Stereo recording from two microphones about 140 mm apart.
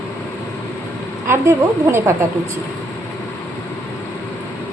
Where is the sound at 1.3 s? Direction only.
20° right (ahead or behind).